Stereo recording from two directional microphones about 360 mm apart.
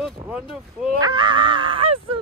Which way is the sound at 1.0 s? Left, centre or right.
Centre.